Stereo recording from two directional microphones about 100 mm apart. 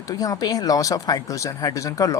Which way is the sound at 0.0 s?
35° left (ahead or behind).